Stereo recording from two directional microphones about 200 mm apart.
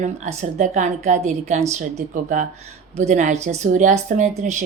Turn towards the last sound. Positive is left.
turn(degrees=-35)  # may be behind; listen again after turning